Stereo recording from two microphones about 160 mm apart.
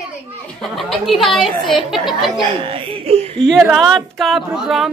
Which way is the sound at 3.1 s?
40° right (ahead or behind).